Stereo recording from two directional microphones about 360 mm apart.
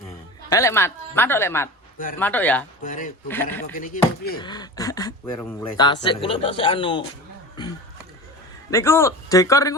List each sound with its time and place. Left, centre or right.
0.5 s speech: centre
2.8 s speech: left
4.4 s speech: centre
8.7 s speech: centre